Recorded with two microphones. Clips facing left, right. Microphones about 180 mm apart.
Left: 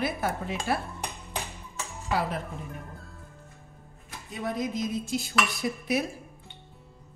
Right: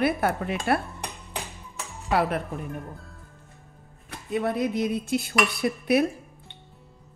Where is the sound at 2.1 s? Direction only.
65° right (ahead or behind).